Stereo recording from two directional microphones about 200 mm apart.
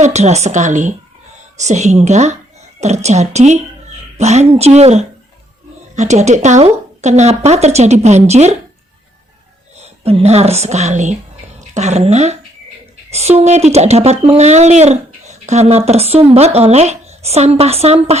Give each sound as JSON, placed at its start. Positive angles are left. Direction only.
{"t": 0.0, "sound": "speech", "side_deg": -35}
{"t": 9.7, "sound": "speech", "side_deg": -30}